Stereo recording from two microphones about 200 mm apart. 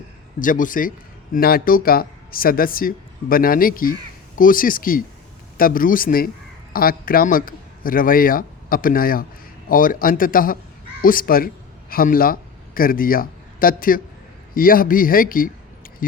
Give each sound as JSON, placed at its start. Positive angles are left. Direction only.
{"t": 0.3, "sound": "a man's voice", "side_deg": 40}